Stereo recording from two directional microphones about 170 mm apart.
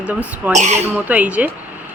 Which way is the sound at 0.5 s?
40° right (ahead or behind).